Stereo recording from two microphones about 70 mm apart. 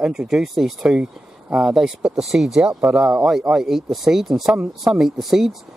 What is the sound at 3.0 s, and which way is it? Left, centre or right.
Speech, centre.